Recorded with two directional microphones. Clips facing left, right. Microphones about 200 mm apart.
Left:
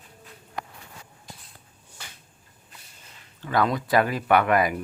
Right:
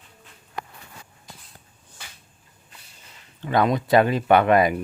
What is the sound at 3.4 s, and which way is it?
Speech, 20° right (ahead or behind).